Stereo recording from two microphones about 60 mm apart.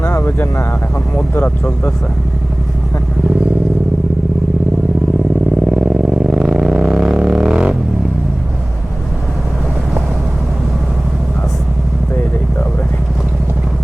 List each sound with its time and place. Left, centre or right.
0.0 s vehicle: left
1.3 s speech: left
5.7 s vehicle: centre